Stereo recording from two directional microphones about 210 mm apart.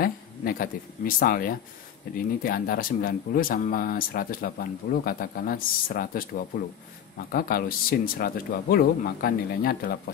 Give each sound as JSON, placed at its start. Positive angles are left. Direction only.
{"t": 0.0, "sound": "speech", "side_deg": 45}